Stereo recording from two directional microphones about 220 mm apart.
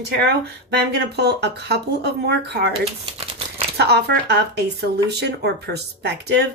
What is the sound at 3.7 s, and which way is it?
A woman's voice, 50° right (ahead or behind).